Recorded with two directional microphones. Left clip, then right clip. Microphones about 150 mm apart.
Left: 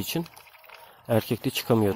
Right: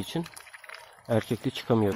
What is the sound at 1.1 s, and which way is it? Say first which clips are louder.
Speech: left 2 dB; 20° left (ahead or behind).